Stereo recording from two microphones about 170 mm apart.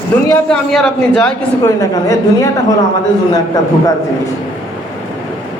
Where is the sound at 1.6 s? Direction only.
20° left (ahead or behind).